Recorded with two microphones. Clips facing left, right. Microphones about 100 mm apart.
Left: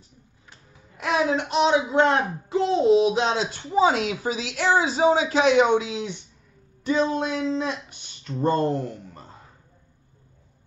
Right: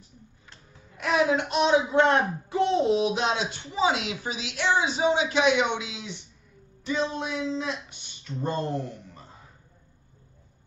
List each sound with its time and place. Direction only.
0.9 s speech: 30° left (ahead or behind); by 9.2 s 55° left (ahead or behind)